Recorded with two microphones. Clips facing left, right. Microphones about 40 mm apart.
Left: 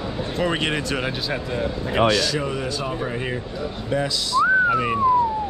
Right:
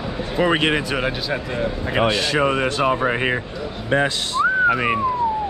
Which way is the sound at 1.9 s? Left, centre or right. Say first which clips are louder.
Right 1 dB; right.